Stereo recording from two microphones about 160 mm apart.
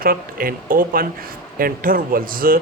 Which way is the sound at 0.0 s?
65° right (ahead or behind).